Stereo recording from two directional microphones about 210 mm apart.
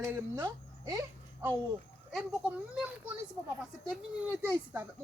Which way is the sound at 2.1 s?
5° right (ahead or behind).